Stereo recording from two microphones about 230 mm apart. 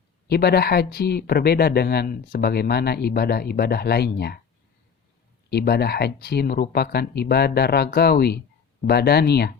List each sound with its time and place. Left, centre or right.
0.3 s speech: left
5.5 s speech: left